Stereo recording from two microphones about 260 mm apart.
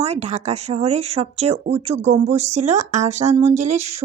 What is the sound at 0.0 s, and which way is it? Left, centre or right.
Speech, right.